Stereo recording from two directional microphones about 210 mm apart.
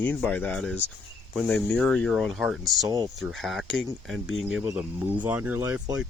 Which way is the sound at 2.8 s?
15° right (ahead or behind).